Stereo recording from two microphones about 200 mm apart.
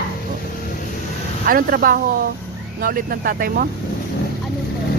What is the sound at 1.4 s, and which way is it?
Speech, 45° right (ahead or behind).